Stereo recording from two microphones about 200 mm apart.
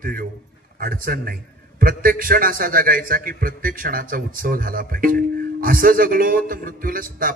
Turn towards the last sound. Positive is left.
turn(degrees=-45)  # may be behind; listen again after turning